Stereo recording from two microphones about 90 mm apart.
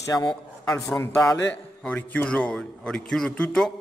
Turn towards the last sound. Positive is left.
turn(degrees=10)  # may be behind; listen again after turning